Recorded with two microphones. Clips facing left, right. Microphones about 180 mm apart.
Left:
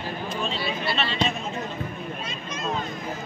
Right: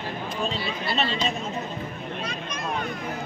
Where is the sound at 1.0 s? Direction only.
40° right (ahead or behind).